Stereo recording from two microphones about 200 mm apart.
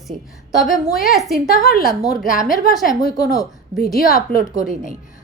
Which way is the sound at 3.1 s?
20° left (ahead or behind).